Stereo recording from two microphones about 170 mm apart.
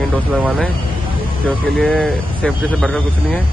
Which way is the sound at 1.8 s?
5° left (ahead or behind).